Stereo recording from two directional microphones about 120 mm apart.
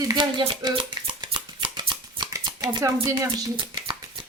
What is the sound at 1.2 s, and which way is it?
Shuffling cards, 40° right (ahead or behind).